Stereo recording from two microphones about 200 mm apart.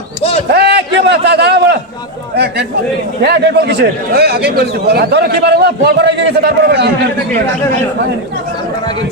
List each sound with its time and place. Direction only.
0.5 s a man's voice: 55° right (ahead or behind)